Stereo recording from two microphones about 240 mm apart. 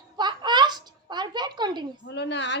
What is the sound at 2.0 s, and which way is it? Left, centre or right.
Speech, left.